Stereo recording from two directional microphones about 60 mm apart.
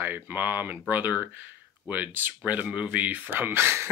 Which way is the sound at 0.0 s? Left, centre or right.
Right.